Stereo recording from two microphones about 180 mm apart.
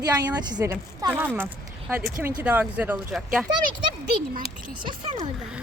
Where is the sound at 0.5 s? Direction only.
20° right (ahead or behind).